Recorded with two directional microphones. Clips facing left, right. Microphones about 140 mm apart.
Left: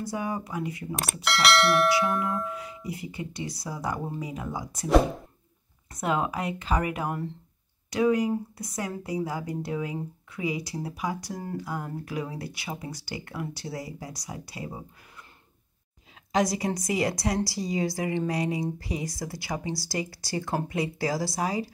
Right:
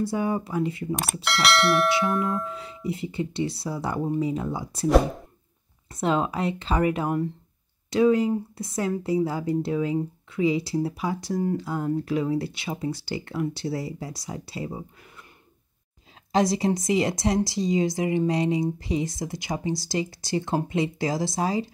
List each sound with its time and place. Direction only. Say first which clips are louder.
0.0 s speech: right 6 dB; 25° right (ahead or behind)
0.9 s speech: right 1 dB; centre (ahead or behind)
2.5 s speech: right 4 dB; 25° right (ahead or behind)
5.9 s speech: right 3 dB; 25° right (ahead or behind)
16.3 s speech: right 4 dB; 30° right (ahead or behind)